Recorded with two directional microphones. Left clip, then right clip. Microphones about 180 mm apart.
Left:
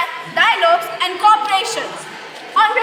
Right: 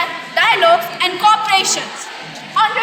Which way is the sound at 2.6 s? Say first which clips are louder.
Left 1 dB; 45° right (ahead or behind).